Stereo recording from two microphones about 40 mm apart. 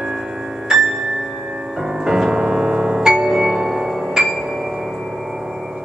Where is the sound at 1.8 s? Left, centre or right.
Centre.